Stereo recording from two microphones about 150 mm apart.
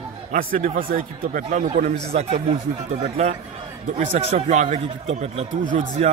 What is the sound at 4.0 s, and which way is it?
Speech, 45° right (ahead or behind).